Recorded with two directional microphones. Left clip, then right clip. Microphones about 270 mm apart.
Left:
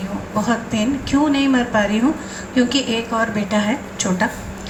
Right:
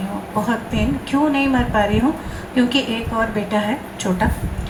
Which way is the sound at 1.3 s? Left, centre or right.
Centre.